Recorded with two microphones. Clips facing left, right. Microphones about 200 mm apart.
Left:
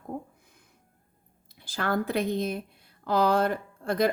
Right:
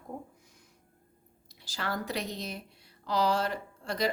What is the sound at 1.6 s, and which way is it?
A woman's voice, 55° left (ahead or behind).